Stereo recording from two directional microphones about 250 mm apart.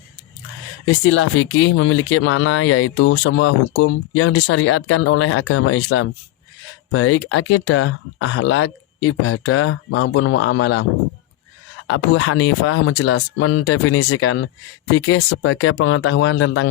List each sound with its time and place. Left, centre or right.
1.0 s speech: left
11.9 s speech: left